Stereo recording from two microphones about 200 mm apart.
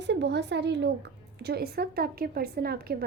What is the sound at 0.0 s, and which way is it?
A woman's voice, 60° right (ahead or behind).